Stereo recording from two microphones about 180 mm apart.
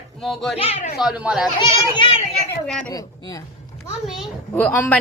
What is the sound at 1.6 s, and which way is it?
Speech, 25° left (ahead or behind).